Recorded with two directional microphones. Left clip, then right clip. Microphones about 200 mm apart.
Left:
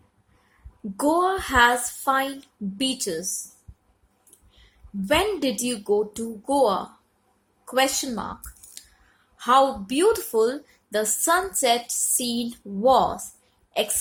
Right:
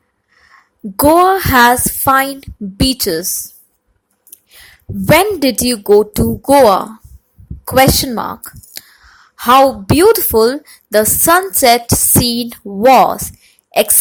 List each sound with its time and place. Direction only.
0.9 s a woman's voice: 45° right (ahead or behind)
5.0 s a woman's voice: 40° right (ahead or behind)